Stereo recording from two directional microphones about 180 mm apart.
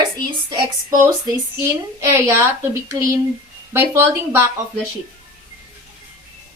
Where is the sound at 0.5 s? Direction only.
20° right (ahead or behind).